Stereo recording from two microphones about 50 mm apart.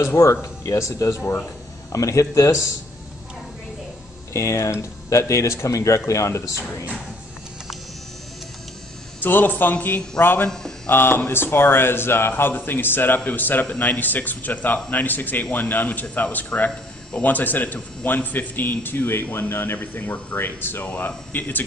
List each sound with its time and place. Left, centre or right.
0.0 s speech: left
4.3 s speech: left
9.2 s speech: left
20.8 s speech: left
21.3 s speech: left